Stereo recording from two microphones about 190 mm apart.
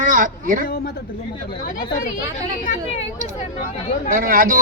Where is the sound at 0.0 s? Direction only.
45° right (ahead or behind).